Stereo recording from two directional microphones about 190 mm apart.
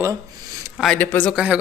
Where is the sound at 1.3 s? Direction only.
5° right (ahead or behind).